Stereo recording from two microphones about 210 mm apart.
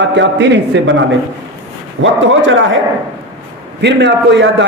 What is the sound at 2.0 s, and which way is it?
Speech, 65° right (ahead or behind).